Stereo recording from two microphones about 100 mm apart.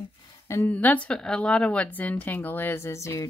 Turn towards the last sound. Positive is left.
turn(degrees=30)  # may be behind; listen again after turning